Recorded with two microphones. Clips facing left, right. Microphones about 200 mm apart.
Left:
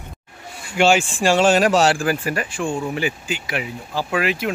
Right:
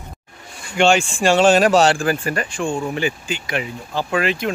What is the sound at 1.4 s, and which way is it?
Speech, 30° right (ahead or behind).